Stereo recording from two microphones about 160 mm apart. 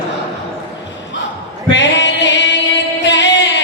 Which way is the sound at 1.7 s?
90° left.